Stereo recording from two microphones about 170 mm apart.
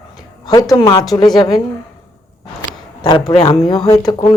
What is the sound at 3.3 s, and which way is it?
A woman's voice, 35° left (ahead or behind).